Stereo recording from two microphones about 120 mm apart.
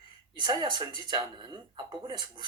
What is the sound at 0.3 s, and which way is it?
Speech, 35° right (ahead or behind).